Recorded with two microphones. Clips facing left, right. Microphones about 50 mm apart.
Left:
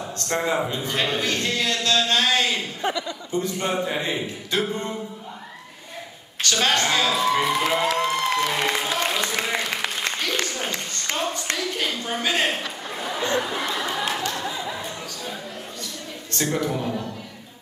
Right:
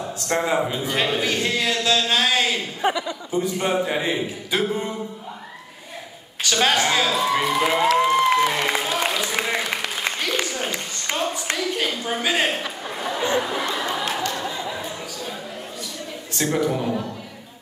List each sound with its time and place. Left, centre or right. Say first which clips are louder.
0.0 s a man's voice: right 2 dB; centre
2.8 s a man's voice: right 3 dB; centre
6.4 s a man's voice: right 2 dB; centre
8.0 s music: right 5 dB; centre
10.0 s applause: right 3 dB; centre
10.4 s a sound: right 1 dB; centre
16.3 s a man's voice: right 3 dB; centre